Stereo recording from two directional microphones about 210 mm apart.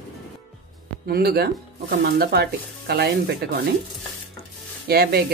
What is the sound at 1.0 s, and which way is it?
Speech, 45° right (ahead or behind).